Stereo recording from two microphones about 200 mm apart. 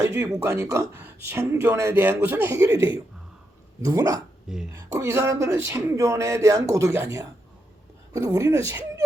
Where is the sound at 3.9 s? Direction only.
15° right (ahead or behind).